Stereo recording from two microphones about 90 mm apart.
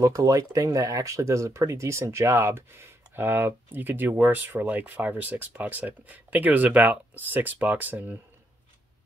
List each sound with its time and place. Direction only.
0.0 s speech: 40° right (ahead or behind); by 8.2 s 20° right (ahead or behind)